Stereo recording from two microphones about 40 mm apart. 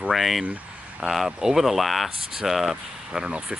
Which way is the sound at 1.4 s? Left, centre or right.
Centre.